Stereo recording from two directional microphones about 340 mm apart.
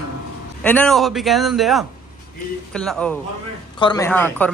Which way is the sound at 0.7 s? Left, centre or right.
Centre.